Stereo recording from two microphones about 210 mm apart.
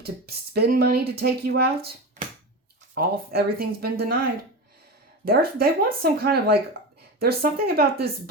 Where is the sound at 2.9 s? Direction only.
50° right (ahead or behind).